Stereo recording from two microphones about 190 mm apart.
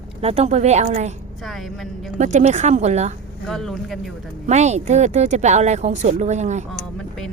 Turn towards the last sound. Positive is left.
turn(degrees=5)  # may be behind; listen again after turning